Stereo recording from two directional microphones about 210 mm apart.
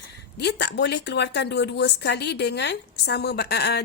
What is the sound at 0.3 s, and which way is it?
A woman's voice, 55° left (ahead or behind).